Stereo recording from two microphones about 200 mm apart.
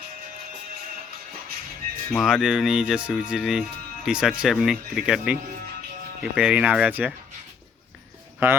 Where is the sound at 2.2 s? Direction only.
5° right (ahead or behind).